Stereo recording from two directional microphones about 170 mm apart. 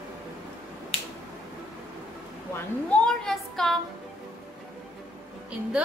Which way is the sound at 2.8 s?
5° left (ahead or behind).